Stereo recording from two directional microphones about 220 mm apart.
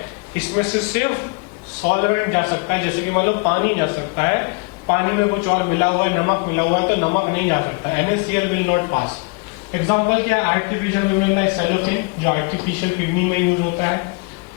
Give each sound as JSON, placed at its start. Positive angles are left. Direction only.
{"t": 0.3, "sound": "a man's voice", "side_deg": 10}
{"t": 8.9, "sound": "a man's voice", "side_deg": 25}